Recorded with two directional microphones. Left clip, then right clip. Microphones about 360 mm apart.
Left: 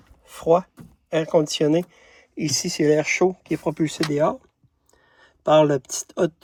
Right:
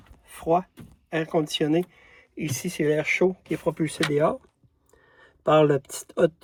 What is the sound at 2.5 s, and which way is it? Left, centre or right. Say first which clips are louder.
Speech: left 5 dB; centre.